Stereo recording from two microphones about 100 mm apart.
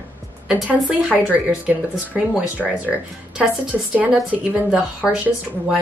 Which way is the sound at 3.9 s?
10° right (ahead or behind).